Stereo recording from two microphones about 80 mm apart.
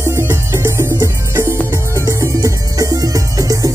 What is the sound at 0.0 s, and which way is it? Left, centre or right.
Music, right.